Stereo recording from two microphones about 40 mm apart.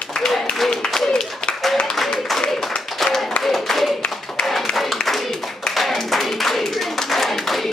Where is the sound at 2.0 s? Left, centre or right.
Centre.